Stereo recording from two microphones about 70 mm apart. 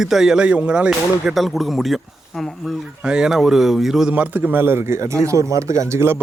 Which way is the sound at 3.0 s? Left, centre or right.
Centre.